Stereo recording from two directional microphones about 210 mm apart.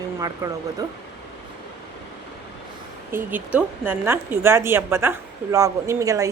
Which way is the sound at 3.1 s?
10° right (ahead or behind).